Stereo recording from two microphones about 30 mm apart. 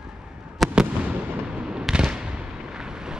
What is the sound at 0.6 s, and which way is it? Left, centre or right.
Fireworks, centre.